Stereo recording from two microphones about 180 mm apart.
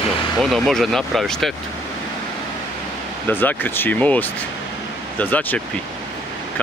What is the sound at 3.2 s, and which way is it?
Speech, 10° left (ahead or behind).